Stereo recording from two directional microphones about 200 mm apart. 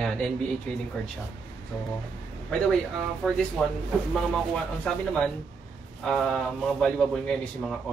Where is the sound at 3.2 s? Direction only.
Centre (ahead or behind).